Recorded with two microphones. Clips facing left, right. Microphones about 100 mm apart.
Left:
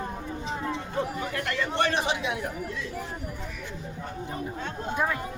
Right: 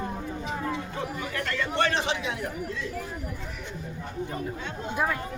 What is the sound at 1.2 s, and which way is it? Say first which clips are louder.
Speech: left 1 dB; 30° left (ahead or behind).